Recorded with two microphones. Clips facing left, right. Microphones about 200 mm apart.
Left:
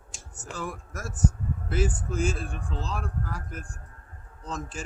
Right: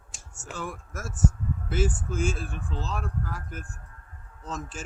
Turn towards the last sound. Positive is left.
turn(degrees=0)  # may be behind; listen again after turning